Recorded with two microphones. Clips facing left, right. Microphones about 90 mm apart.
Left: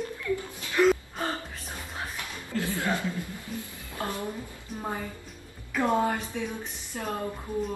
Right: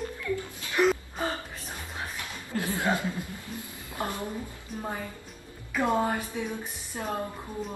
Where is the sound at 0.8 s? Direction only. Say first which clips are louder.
Left 2 dB; 15° right (ahead or behind).